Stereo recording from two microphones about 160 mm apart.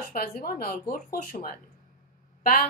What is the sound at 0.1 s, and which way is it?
A woman's voice, 60° left (ahead or behind).